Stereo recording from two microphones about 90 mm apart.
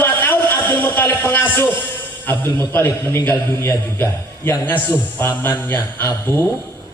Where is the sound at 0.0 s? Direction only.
20° left (ahead or behind).